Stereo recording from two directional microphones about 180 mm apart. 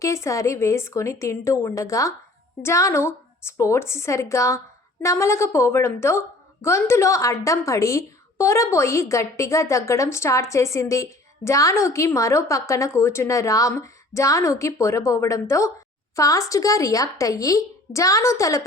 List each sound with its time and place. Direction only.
0.0 s a woman's voice: 15° left (ahead or behind)